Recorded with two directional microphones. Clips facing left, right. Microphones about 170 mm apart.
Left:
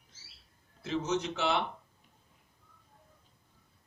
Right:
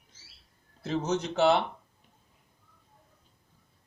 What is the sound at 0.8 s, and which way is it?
Speech, 40° right (ahead or behind).